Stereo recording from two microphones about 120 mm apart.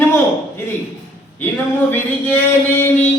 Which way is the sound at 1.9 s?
15° left (ahead or behind).